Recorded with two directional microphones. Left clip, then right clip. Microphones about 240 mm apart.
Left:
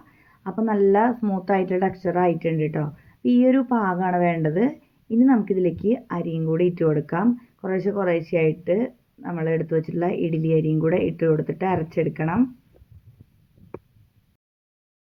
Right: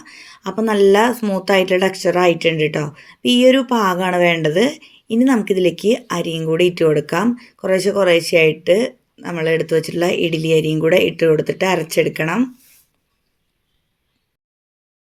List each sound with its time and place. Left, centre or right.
0.4 s a woman's voice: right
0.9 s speech: right